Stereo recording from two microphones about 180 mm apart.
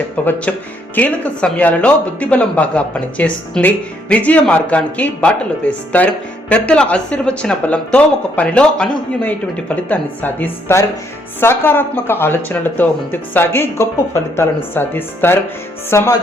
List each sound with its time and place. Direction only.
0.3 s speech: 5° left (ahead or behind)